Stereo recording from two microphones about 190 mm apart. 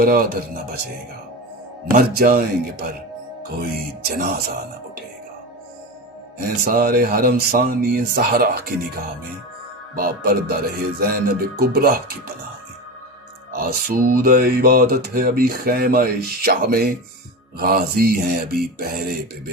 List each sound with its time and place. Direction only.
0.0 s music: 50° right (ahead or behind)
1.9 s music: 50° right (ahead or behind)
6.4 s music: 50° right (ahead or behind)
13.5 s music: 50° right (ahead or behind)